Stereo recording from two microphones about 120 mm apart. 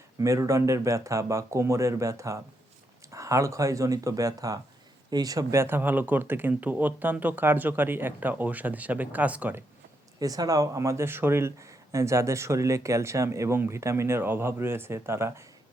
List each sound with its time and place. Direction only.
0.2 s speech: 25° right (ahead or behind)
10.2 s speech: 30° right (ahead or behind)